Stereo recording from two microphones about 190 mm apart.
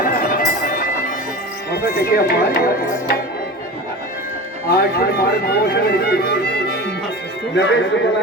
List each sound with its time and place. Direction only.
0.0 s music: 50° left (ahead or behind)
1.7 s speech: 55° left (ahead or behind)
4.7 s a man's voice: 55° left (ahead or behind)